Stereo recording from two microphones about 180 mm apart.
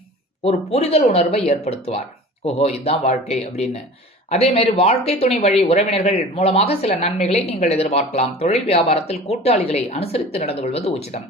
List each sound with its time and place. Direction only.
0.4 s speech: 35° left (ahead or behind)